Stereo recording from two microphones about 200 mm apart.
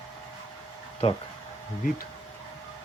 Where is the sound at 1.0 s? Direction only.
30° left (ahead or behind).